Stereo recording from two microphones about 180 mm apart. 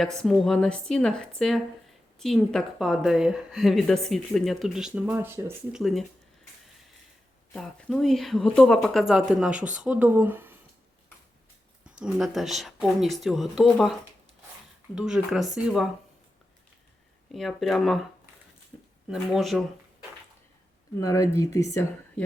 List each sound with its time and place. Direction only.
0.2 s speech: centre (ahead or behind); by 5.8 s 15° right (ahead or behind)
5.8 s speech: centre (ahead or behind)
7.5 s speech: 5° left (ahead or behind)
11.8 s speech: 5° right (ahead or behind)
14.9 s speech: 5° right (ahead or behind)
17.3 s speech: centre (ahead or behind)
18.7 s a sound: 5° right (ahead or behind)
19.0 s speech: 5° right (ahead or behind)
21.0 s speech: 20° left (ahead or behind)